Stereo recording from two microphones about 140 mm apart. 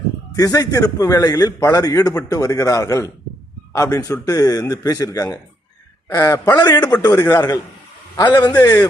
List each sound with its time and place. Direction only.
0.3 s a man's voice: 25° left (ahead or behind)